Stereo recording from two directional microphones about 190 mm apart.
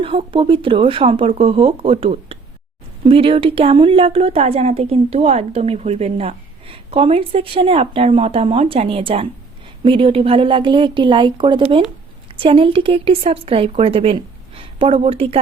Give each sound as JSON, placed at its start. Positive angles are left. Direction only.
{"t": 0.0, "sound": "speech", "side_deg": -25}